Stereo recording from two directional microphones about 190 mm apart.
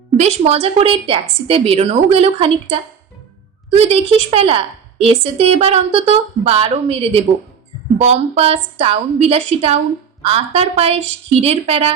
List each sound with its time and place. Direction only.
0.2 s a woman's voice: 35° right (ahead or behind)